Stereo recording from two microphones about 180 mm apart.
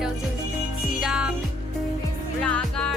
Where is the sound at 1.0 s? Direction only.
5° right (ahead or behind).